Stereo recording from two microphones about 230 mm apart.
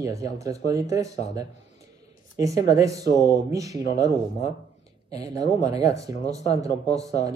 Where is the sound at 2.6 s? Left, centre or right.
Centre.